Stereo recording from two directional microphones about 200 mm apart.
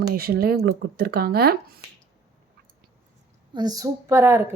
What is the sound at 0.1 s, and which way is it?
Speech, 50° right (ahead or behind).